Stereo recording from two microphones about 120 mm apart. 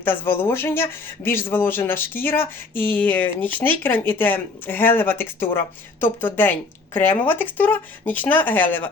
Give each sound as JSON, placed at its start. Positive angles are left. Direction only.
{"t": 0.0, "sound": "speech", "side_deg": 20}